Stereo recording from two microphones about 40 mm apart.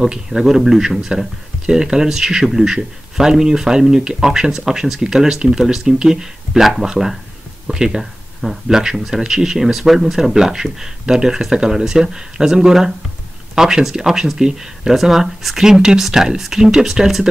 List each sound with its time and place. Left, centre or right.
0.3 s speech: centre
8.0 s speech: centre